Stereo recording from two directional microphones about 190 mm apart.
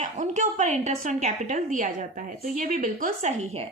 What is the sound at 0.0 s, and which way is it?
Speech, 40° right (ahead or behind).